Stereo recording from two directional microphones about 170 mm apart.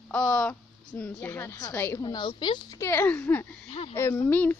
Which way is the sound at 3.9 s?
10° left (ahead or behind).